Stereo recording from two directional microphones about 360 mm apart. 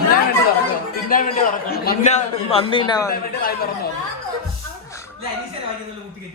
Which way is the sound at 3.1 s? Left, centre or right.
Left.